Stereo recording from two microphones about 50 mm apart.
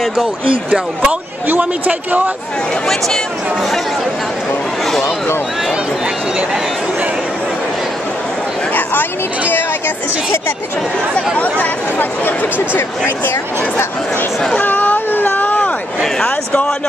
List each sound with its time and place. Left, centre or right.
0.0 s speech: centre
0.7 s speech: centre
1.6 s speech: right
11.6 s speech: left
14.6 s a sound: left